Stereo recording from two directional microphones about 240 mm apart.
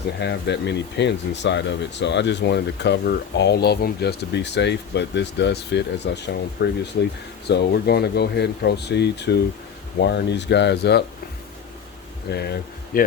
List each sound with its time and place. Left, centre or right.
0.2 s speech: left
12.3 s speech: left